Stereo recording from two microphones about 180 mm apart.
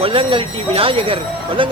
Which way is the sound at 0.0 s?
30° right (ahead or behind).